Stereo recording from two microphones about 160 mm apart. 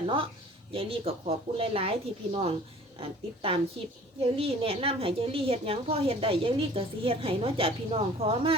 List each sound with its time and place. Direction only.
0.0 s a woman's voice: 35° right (ahead or behind)